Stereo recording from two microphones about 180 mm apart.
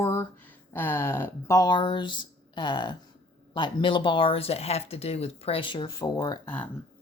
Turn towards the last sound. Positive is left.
turn(degrees=20)  # may be behind; listen again after turning